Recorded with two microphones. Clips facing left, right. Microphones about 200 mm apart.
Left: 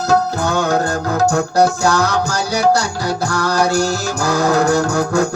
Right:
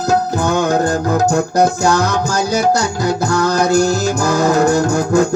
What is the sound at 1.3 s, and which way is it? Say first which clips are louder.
Music: right 1 dB; 20° right (ahead or behind).